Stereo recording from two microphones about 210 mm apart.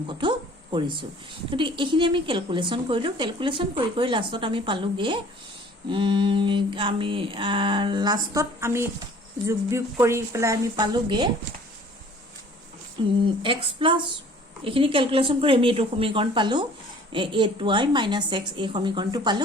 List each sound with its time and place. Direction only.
0.1 s a sound: 20° right (ahead or behind)
1.5 s a woman's voice: 25° right (ahead or behind)
13.0 s a woman's voice: 20° right (ahead or behind)